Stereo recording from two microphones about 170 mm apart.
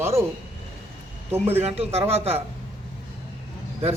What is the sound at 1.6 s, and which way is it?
Speech, 35° right (ahead or behind).